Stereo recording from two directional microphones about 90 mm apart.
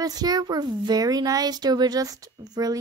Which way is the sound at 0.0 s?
45° right (ahead or behind).